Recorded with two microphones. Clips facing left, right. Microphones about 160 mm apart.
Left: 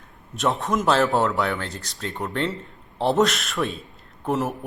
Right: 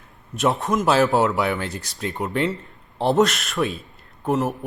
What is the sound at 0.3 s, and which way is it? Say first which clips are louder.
A man's voice: right 2 dB; centre (ahead or behind).